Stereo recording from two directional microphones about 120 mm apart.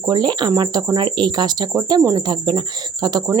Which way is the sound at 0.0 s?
35° right (ahead or behind).